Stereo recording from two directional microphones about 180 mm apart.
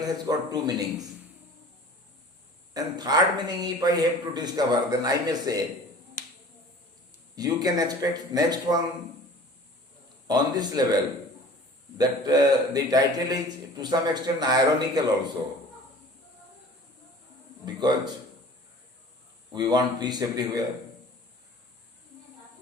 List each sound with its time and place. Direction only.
0.0 s a man's voice: 20° right (ahead or behind)
2.7 s a man's voice: 20° right (ahead or behind)
6.2 s finger snapping: 45° left (ahead or behind)
7.3 s a man's voice: 20° right (ahead or behind)
10.2 s a man's voice: 20° right (ahead or behind)
17.7 s a man's voice: 25° right (ahead or behind)
19.5 s a man's voice: 25° right (ahead or behind)